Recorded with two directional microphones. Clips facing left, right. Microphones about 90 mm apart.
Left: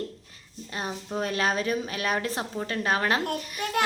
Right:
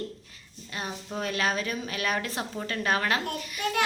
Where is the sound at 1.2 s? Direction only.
35° left (ahead or behind).